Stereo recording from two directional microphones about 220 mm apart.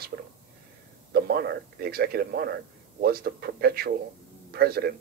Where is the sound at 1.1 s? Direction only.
45° right (ahead or behind).